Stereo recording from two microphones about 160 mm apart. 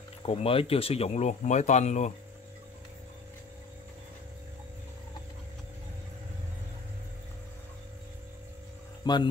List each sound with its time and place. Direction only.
0.2 s speech: 35° left (ahead or behind)
9.0 s speech: 25° left (ahead or behind)